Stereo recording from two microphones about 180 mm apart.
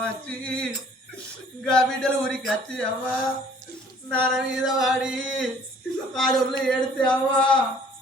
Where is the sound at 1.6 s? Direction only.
5° left (ahead or behind).